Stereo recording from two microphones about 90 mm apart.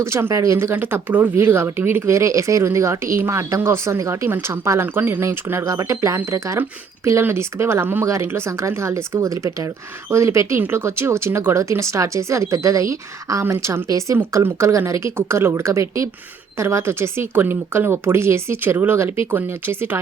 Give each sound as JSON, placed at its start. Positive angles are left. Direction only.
{"t": 0.0, "sound": "speech", "side_deg": -30}